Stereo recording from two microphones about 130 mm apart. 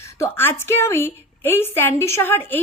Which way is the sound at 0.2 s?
20° left (ahead or behind).